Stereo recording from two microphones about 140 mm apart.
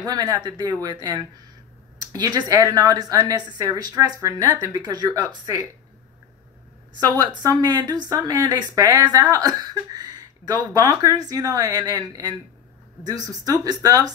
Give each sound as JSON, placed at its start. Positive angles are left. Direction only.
{"t": 0.0, "sound": "speech", "side_deg": -30}
{"t": 7.1, "sound": "speech", "side_deg": -30}